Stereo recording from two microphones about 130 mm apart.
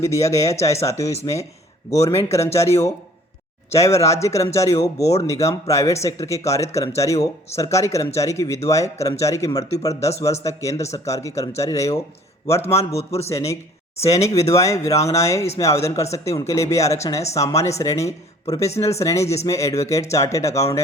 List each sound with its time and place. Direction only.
0.0 s a man's voice: 25° left (ahead or behind)
13.0 s a man's voice: 50° left (ahead or behind)
13.2 s a man's voice: 25° left (ahead or behind)